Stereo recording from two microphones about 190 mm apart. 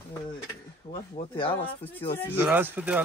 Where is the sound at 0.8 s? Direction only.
25° left (ahead or behind).